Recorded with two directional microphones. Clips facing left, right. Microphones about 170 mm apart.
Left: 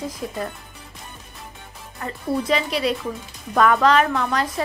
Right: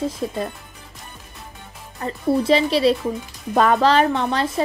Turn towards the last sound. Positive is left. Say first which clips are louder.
# right 2 dB
turn(degrees=-30)  # may be behind; listen again after turning